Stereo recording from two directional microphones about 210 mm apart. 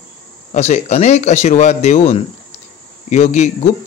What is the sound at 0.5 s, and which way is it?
Speech, 30° left (ahead or behind).